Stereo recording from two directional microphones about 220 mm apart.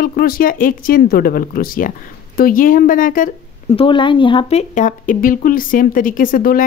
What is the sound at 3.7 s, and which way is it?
Speech, 25° left (ahead or behind).